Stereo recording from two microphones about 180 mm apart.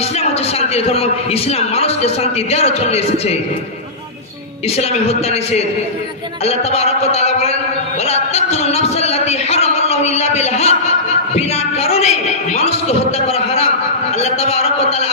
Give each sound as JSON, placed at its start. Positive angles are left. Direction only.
{"t": 0.7, "sound": "a man's voice", "side_deg": 35}
{"t": 4.8, "sound": "a man's voice", "side_deg": 35}
{"t": 8.0, "sound": "a sound", "side_deg": 35}
{"t": 12.5, "sound": "a man's voice", "side_deg": 35}